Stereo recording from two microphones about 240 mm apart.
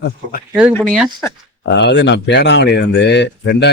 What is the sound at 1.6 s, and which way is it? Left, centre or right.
Speech, left.